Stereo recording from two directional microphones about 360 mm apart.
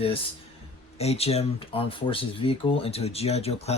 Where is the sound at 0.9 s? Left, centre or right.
Centre.